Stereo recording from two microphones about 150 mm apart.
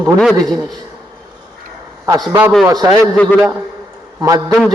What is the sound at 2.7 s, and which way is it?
Speech, 25° right (ahead or behind).